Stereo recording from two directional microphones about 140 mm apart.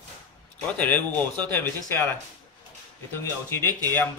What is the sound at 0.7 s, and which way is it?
Speech, 10° left (ahead or behind).